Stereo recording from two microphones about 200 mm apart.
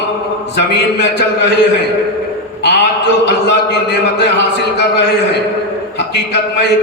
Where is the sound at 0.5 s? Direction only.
55° left (ahead or behind).